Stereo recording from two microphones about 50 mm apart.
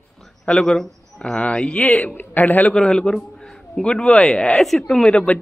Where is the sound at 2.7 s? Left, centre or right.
Centre.